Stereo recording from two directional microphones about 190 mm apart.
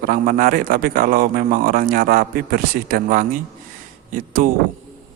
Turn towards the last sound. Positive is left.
turn(degrees=-45)  # may be behind; listen again after turning